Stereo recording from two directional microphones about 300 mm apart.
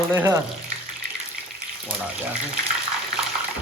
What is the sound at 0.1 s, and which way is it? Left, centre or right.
Speech, centre.